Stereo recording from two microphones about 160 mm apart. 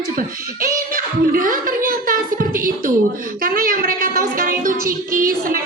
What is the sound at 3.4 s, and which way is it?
Music, 60° right (ahead or behind).